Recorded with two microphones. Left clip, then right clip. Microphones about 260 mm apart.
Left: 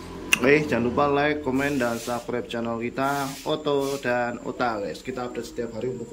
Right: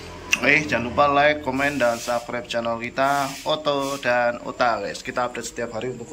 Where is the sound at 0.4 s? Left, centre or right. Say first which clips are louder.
Right 2 dB; centre.